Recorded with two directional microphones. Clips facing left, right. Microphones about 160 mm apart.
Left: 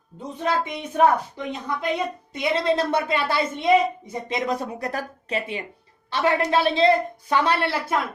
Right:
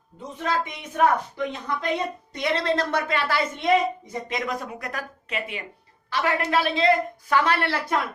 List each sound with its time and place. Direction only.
0.3 s a woman's voice: 25° left (ahead or behind)